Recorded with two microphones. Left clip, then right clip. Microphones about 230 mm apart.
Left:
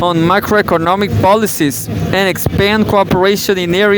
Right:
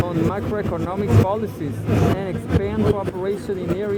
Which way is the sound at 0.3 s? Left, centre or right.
Left.